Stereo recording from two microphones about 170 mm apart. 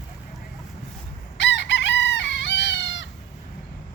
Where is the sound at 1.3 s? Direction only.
90° left.